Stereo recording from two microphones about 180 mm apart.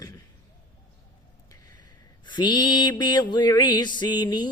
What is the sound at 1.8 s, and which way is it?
Mantra, 25° left (ahead or behind).